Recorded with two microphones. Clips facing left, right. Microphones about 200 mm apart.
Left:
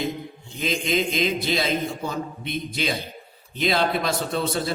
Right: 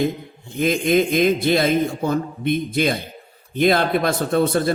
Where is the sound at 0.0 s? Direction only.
55° right (ahead or behind).